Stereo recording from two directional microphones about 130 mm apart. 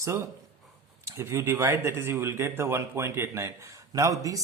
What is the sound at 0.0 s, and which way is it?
Speech, 20° right (ahead or behind).